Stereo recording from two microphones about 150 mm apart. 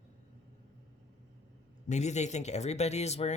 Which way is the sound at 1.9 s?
50° left (ahead or behind).